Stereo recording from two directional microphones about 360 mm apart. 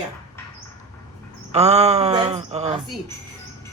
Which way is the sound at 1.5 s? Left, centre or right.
Centre.